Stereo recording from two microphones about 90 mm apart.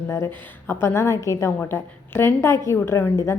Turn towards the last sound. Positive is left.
turn(degrees=35)  # may be behind; listen again after turning